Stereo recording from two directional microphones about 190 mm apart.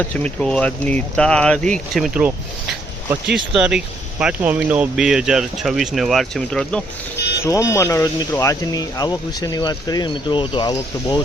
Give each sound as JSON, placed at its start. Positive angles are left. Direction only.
{"t": 0.0, "sound": "speech", "side_deg": 10}
{"t": 3.3, "sound": "speech", "side_deg": -5}
{"t": 7.2, "sound": "music", "side_deg": 60}
{"t": 7.4, "sound": "speech", "side_deg": 15}